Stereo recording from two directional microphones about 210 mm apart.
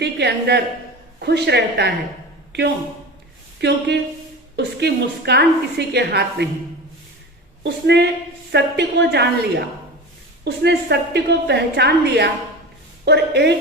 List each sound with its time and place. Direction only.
0.0 s a woman's voice: 55° right (ahead or behind)
7.6 s a woman's voice: 55° right (ahead or behind)